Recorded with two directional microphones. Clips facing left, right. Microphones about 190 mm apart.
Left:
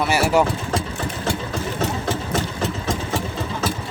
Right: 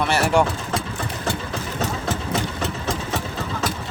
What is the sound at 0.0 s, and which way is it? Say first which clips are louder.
Speech: left 1 dB; 5° left (ahead or behind).